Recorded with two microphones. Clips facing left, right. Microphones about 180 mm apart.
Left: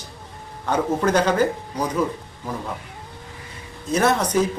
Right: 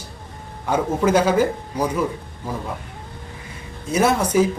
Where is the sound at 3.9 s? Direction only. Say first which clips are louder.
Right 1 dB; 10° right (ahead or behind).